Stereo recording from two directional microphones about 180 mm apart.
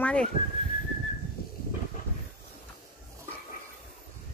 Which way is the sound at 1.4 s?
55° left (ahead or behind).